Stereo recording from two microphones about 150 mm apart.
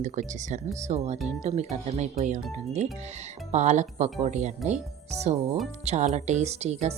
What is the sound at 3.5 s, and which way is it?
Speech, 50° right (ahead or behind).